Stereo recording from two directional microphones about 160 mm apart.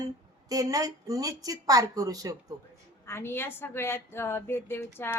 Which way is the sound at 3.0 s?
15° left (ahead or behind).